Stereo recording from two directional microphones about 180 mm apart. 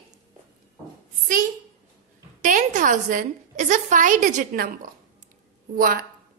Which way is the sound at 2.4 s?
45° right (ahead or behind).